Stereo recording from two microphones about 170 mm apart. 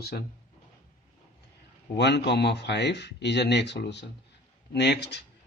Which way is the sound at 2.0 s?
90° left.